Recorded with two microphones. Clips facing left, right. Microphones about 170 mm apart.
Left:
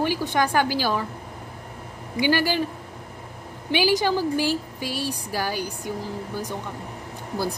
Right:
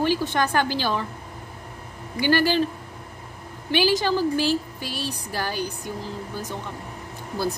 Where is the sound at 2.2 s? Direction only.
10° left (ahead or behind).